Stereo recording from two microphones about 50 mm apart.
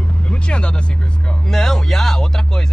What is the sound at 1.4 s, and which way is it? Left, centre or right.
Speech, centre.